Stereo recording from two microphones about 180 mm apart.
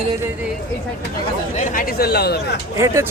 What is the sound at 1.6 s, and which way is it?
Speech, 55° left (ahead or behind).